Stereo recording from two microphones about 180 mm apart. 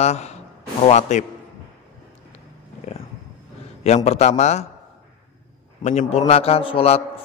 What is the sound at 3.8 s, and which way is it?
Speech, 35° left (ahead or behind).